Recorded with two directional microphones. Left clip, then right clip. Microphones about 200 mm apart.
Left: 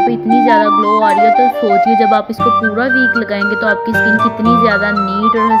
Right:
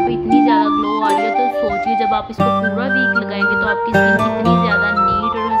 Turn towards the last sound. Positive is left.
turn(degrees=0)  # may be behind; listen again after turning